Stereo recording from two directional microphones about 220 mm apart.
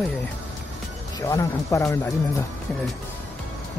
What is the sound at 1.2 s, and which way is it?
Speech, 15° left (ahead or behind).